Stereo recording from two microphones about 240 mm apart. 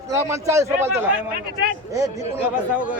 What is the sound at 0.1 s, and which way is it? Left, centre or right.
A man's voice, centre.